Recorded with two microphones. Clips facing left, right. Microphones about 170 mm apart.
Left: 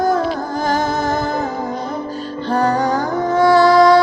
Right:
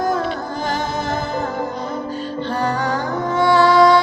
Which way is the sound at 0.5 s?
40° left (ahead or behind).